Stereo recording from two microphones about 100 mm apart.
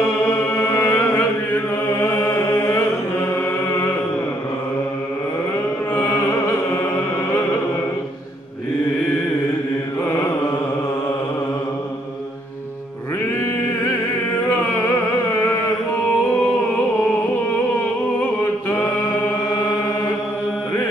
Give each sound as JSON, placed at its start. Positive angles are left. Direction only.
{"t": 0.6, "sound": "music", "side_deg": 20}
{"t": 5.9, "sound": "music", "side_deg": 30}
{"t": 18.4, "sound": "music", "side_deg": 25}